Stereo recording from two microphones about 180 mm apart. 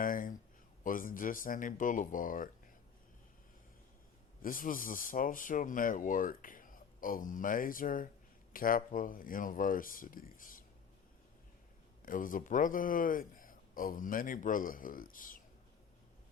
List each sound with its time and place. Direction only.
0.0 s a sound: 50° left (ahead or behind)
0.9 s speech: 50° left (ahead or behind)
4.4 s speech: 50° left (ahead or behind)
12.0 s speech: 50° left (ahead or behind)